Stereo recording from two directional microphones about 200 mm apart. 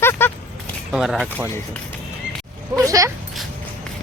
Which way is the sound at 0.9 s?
Centre (ahead or behind).